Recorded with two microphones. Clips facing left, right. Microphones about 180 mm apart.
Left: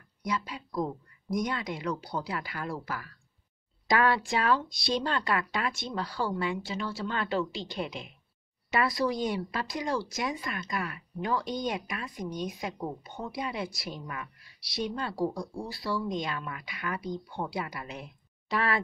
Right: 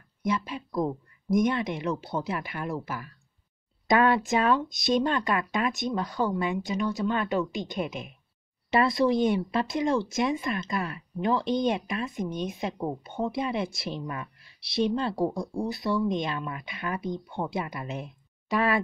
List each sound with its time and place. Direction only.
0.2 s speech: 25° right (ahead or behind)